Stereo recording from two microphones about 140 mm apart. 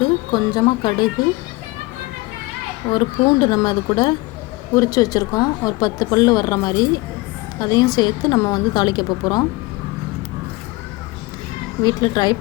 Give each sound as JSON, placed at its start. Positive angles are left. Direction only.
{"t": 0.0, "sound": "speech", "side_deg": 30}
{"t": 2.9, "sound": "a woman's voice", "side_deg": 30}
{"t": 11.8, "sound": "a woman's voice", "side_deg": 30}